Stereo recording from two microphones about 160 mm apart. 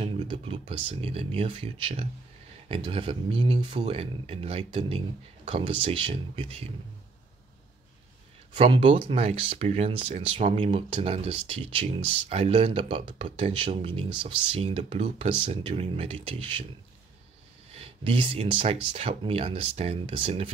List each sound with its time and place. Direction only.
0.0 s speech: 35° right (ahead or behind)
8.5 s speech: 35° right (ahead or behind)
17.7 s speech: 35° right (ahead or behind)